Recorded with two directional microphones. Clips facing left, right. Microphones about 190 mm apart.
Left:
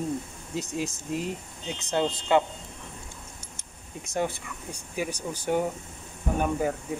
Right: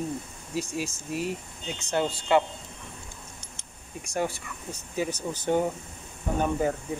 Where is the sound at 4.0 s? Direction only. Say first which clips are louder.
Even; 20° left (ahead or behind).